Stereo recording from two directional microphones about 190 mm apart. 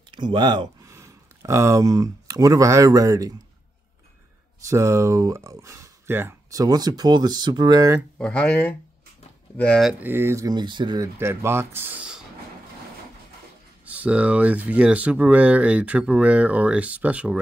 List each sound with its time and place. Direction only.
0.1 s speech: 25° right (ahead or behind)
4.6 s speech: 15° right (ahead or behind)
8.2 s speech: 5° left (ahead or behind); by 11.1 s 25° right (ahead or behind)
11.1 s speech: 10° right (ahead or behind)
13.8 s speech: 5° right (ahead or behind)